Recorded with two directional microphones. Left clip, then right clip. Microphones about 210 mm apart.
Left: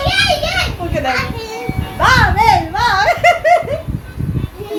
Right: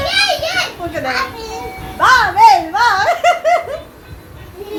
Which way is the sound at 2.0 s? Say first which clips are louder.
Right 3 dB; 10° left (ahead or behind).